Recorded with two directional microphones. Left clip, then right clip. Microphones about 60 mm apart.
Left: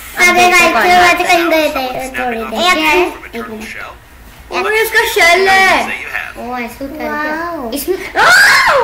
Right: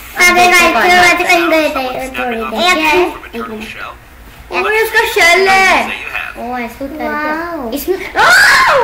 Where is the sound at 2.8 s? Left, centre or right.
Left.